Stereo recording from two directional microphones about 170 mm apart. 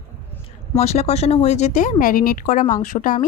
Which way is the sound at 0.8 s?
40° left (ahead or behind).